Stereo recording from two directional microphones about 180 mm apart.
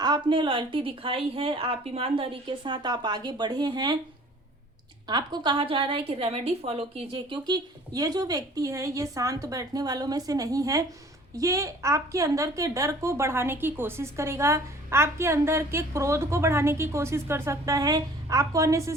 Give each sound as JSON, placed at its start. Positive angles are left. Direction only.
{"t": 0.0, "sound": "a woman's voice", "side_deg": -25}
{"t": 5.0, "sound": "a woman's voice", "side_deg": -25}